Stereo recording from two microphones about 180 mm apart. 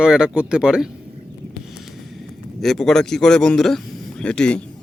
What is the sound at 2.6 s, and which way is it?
A man's voice, centre (ahead or behind).